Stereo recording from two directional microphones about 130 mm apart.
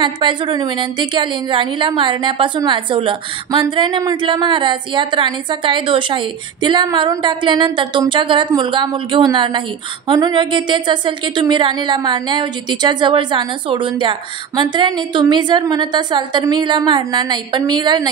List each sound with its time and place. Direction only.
0.0 s a woman's voice: 35° right (ahead or behind)